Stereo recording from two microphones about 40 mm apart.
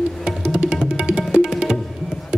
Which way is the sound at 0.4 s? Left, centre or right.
Right.